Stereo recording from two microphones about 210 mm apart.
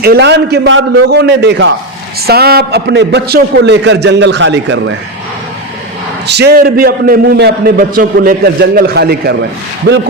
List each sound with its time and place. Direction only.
0.0 s a man's voice: 50° right (ahead or behind)
2.2 s a man's voice: 50° right (ahead or behind)
6.2 s a man's voice: 50° right (ahead or behind)